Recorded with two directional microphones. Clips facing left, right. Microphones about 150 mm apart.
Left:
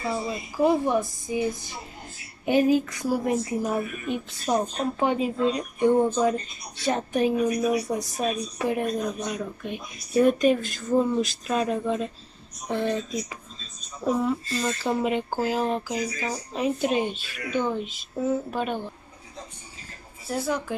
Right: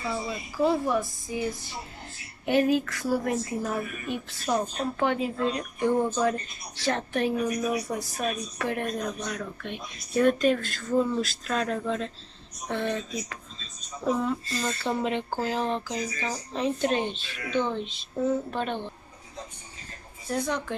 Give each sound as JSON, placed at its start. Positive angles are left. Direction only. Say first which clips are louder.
{"t": 0.1, "sound": "a woman's voice", "louder": "left 3 dB", "side_deg": 20}
{"t": 20.2, "sound": "speech", "louder": "left 1 dB", "side_deg": 5}